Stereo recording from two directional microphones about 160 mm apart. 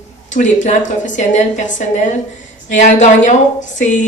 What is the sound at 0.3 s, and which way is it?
A woman's voice, 50° left (ahead or behind).